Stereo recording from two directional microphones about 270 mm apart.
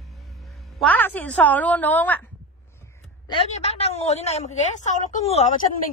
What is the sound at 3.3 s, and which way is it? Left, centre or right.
A woman's voice, left.